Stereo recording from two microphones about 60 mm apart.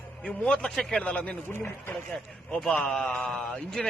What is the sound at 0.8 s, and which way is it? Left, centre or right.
Speech, centre.